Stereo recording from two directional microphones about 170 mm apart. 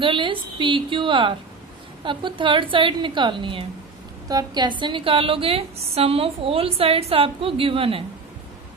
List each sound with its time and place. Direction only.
0.0 s a woman's voice: 30° right (ahead or behind)